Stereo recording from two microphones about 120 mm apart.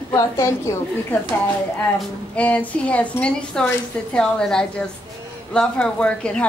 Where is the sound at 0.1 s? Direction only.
25° left (ahead or behind).